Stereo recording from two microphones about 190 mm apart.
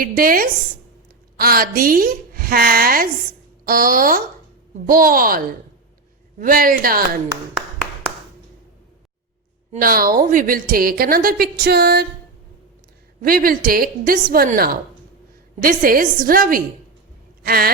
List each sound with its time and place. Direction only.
0.0 s a woman's voice: 50° right (ahead or behind)
6.4 s a woman's voice: 45° right (ahead or behind)
9.7 s a woman's voice: 50° right (ahead or behind)
13.2 s a woman's voice: 50° right (ahead or behind)
17.4 s a sound: 55° right (ahead or behind)